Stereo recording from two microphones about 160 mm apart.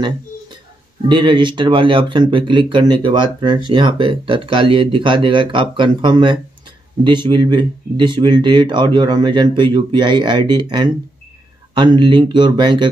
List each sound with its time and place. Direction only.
1.0 s speech: 30° right (ahead or behind)